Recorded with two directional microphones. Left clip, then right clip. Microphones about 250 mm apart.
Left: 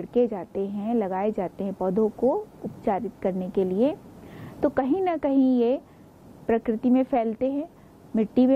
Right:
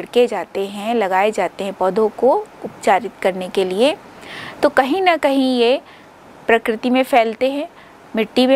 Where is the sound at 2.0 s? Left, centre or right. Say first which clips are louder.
Right 9 dB; right.